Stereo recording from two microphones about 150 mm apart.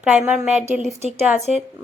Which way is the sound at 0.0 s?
10° right (ahead or behind).